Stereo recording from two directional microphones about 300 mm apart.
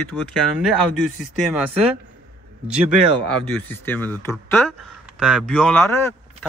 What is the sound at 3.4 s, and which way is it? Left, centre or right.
Speech, centre.